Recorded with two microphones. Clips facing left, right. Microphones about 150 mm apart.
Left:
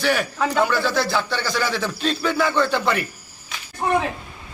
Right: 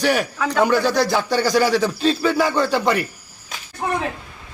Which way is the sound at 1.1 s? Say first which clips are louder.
Right 6 dB; 40° right (ahead or behind).